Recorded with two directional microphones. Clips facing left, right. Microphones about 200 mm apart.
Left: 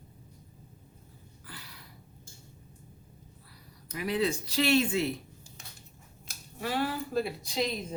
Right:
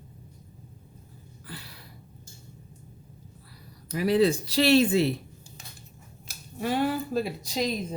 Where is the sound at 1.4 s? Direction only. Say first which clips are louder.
Right 6 dB; 30° right (ahead or behind).